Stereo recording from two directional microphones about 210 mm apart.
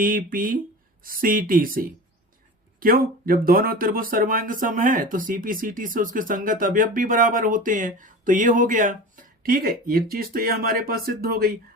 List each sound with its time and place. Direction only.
0.0 s speech: 40° right (ahead or behind)